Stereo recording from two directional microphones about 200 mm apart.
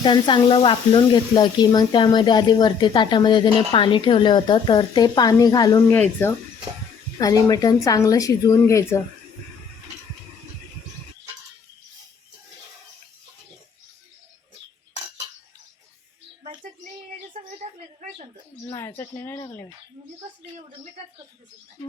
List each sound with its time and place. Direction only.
0.0 s speech: 25° left (ahead or behind)
7.4 s speech: 20° left (ahead or behind)
17.3 s a sound: 35° right (ahead or behind)
18.7 s speech: 10° left (ahead or behind)